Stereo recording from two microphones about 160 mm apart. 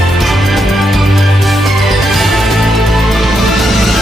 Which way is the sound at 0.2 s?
Centre (ahead or behind).